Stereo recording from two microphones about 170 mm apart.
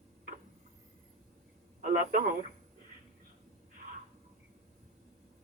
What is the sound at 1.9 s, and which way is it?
Speech, 55° right (ahead or behind).